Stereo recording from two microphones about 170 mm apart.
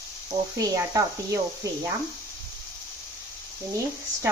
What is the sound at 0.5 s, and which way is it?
Speech, 20° right (ahead or behind).